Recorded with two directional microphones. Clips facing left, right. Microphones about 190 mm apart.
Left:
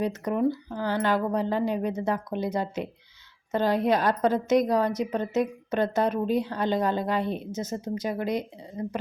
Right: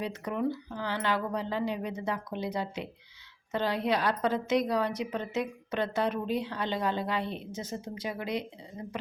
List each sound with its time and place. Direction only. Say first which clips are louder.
0.0 s a woman's voice: left 6 dB; 45° left (ahead or behind)